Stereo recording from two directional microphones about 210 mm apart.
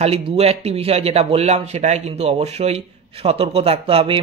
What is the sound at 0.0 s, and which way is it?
A man's voice, 30° right (ahead or behind).